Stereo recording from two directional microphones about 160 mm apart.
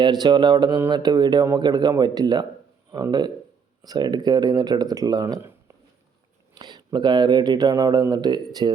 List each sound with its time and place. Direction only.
0.0 s speech: 25° right (ahead or behind)